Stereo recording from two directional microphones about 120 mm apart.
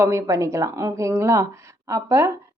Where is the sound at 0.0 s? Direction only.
25° right (ahead or behind).